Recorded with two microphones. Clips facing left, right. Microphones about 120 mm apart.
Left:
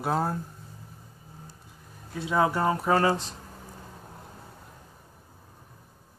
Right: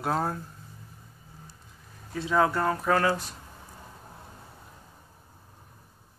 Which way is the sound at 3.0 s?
25° left (ahead or behind).